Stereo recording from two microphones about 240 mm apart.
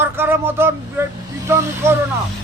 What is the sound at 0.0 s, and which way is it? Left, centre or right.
Speech, centre.